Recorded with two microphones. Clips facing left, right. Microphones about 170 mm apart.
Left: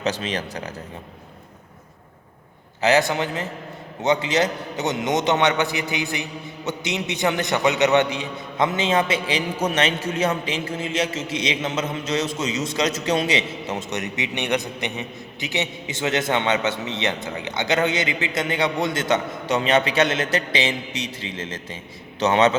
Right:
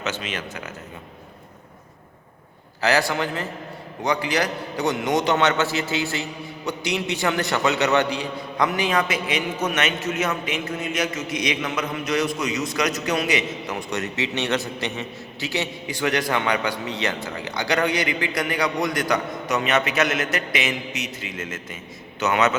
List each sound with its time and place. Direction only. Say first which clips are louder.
0.0 s speech: left 4 dB; 35° left (ahead or behind)
2.8 s a man's voice: left 2 dB; 20° left (ahead or behind)